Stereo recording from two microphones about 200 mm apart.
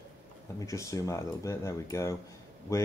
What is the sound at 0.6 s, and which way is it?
Speech, 15° left (ahead or behind).